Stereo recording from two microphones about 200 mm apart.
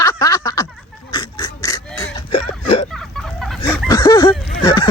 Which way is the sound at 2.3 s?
30° left (ahead or behind).